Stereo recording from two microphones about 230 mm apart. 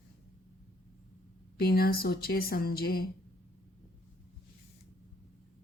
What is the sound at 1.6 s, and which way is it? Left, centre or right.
A woman's voice, left.